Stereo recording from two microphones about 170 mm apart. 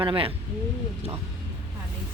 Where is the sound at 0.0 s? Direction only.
30° right (ahead or behind).